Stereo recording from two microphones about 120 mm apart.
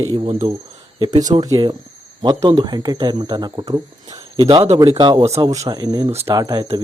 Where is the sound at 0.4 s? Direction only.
55° right (ahead or behind).